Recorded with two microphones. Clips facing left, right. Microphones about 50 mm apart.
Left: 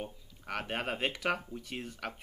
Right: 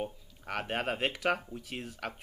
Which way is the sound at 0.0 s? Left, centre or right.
Centre.